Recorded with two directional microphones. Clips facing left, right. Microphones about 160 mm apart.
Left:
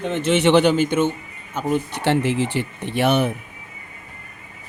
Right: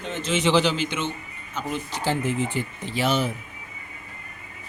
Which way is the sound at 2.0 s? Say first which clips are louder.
Left 3 dB; 75° left (ahead or behind).